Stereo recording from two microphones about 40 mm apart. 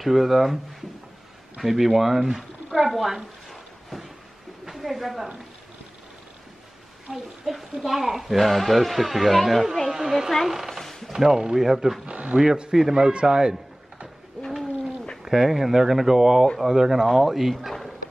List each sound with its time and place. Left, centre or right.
0.0 s speech: centre
2.9 s a woman's voice: centre
3.4 s a sound: centre
4.6 s a woman's voice: centre
7.5 s speech: centre
10.3 s a sound: centre
11.1 s speech: centre
12.1 s speech: right
12.4 s speech: right
15.2 s speech: centre